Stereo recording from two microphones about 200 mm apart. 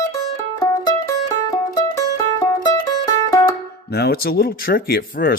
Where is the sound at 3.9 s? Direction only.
50° left (ahead or behind).